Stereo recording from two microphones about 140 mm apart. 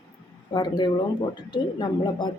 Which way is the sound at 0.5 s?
30° left (ahead or behind).